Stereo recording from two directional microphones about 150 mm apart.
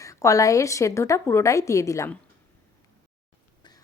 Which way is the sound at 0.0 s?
20° left (ahead or behind).